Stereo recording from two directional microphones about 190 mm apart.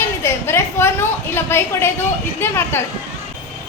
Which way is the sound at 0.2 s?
15° left (ahead or behind).